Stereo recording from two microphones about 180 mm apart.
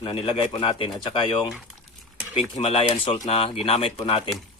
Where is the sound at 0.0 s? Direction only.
30° left (ahead or behind).